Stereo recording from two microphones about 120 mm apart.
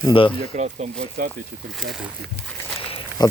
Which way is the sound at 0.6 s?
70° right (ahead or behind).